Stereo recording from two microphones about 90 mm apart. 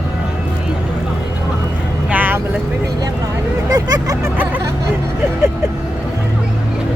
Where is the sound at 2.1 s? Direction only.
20° right (ahead or behind).